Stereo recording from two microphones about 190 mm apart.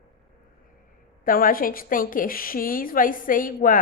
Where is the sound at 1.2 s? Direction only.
50° left (ahead or behind).